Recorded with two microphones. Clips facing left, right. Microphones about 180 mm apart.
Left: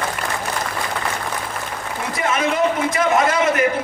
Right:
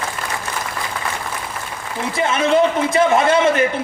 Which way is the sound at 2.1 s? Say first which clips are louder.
Right 4 dB; 30° right (ahead or behind).